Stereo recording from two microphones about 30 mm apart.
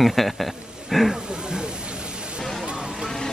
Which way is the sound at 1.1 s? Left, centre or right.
Right.